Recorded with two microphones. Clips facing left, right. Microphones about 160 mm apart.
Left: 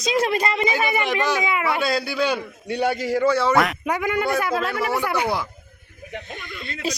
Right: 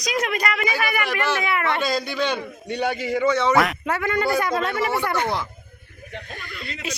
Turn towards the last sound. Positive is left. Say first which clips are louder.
# left 1 dB
turn(degrees=20)  # may be behind; listen again after turning